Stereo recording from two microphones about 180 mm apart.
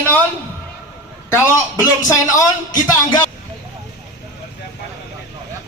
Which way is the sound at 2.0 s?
20° left (ahead or behind).